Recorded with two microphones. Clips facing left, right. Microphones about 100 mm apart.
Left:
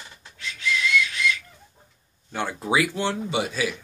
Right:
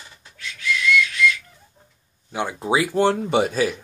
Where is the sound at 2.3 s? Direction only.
15° right (ahead or behind).